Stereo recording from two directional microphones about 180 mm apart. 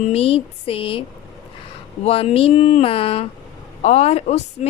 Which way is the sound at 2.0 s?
35° left (ahead or behind).